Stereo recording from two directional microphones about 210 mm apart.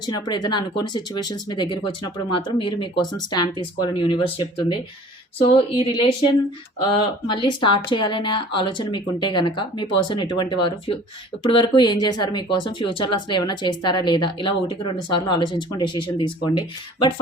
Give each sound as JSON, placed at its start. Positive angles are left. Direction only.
{"t": 0.0, "sound": "speech", "side_deg": 20}